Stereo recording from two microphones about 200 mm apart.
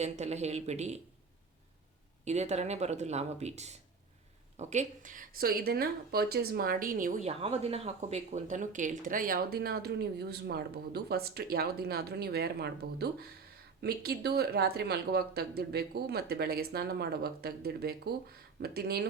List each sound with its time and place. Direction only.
0.0 s speech: 35° right (ahead or behind)
2.2 s speech: 35° right (ahead or behind); by 19.0 s 50° right (ahead or behind)